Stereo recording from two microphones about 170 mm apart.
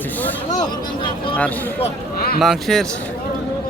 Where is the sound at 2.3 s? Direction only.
Centre (ahead or behind).